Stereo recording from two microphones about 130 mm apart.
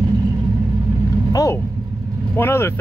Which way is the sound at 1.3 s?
25° left (ahead or behind).